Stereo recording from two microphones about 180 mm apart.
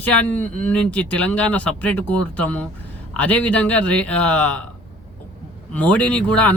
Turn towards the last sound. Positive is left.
turn(degrees=5)  # may be behind; listen again after turning